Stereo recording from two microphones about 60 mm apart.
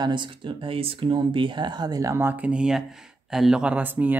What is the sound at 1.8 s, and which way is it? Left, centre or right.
Speech, right.